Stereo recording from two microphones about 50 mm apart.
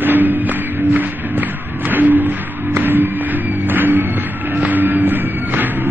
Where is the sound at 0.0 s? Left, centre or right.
Right.